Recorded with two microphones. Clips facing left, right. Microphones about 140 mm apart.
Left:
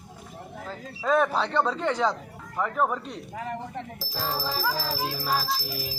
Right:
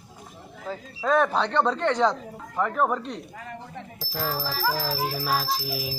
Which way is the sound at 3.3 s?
60° left (ahead or behind).